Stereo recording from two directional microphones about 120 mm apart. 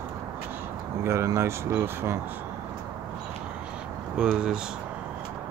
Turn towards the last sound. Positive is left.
turn(degrees=-5)  # may be behind; listen again after turning